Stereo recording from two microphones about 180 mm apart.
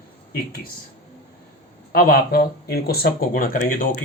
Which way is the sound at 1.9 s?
55° left (ahead or behind).